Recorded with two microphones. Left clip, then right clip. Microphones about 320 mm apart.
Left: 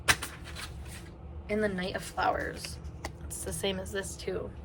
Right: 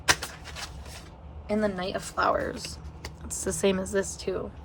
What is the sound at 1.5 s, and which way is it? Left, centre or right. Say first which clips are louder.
A woman's voice: right 3 dB; centre.